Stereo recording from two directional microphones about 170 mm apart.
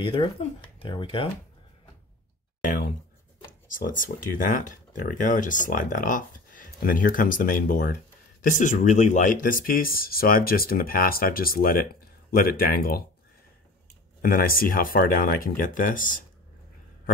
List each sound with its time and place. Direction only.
0.0 s speech: 30° left (ahead or behind)
2.6 s speech: 50° left (ahead or behind)
14.2 s speech: 60° left (ahead or behind)